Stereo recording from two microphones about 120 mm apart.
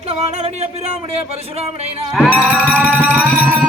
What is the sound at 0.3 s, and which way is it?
Speech, 65° right (ahead or behind).